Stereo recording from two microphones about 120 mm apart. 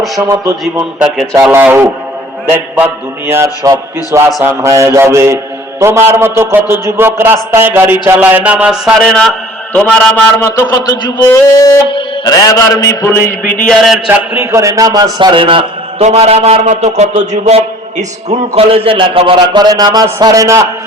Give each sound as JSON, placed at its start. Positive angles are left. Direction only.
{"t": 0.2, "sound": "a man's voice", "side_deg": -30}
{"t": 0.6, "sound": "a sound", "side_deg": -10}
{"t": 1.5, "sound": "a man's voice", "side_deg": -15}
{"t": 7.5, "sound": "a sound", "side_deg": -20}
{"t": 9.0, "sound": "a man's voice", "side_deg": 5}
{"t": 9.7, "sound": "a sound", "side_deg": 5}
{"t": 10.7, "sound": "mantra", "side_deg": 35}
{"t": 11.5, "sound": "music", "side_deg": 30}
{"t": 11.9, "sound": "mantra", "side_deg": 45}
{"t": 13.1, "sound": "a sound", "side_deg": 20}
{"t": 14.1, "sound": "a man's voice", "side_deg": -20}
{"t": 15.4, "sound": "a man's voice", "side_deg": -50}
{"t": 16.0, "sound": "a man's voice", "side_deg": -60}